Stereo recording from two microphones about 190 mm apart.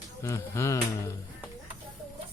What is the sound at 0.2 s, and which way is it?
Speech, 15° left (ahead or behind).